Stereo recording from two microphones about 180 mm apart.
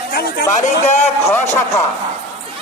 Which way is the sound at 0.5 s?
40° left (ahead or behind).